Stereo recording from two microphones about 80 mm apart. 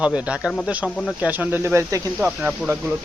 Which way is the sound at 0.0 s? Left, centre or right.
Centre.